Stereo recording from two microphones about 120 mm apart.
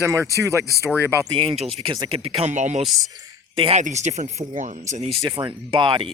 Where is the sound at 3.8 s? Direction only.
90° right.